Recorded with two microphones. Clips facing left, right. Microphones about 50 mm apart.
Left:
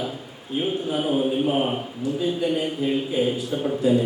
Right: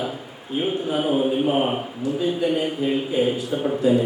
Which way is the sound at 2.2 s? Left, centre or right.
Centre.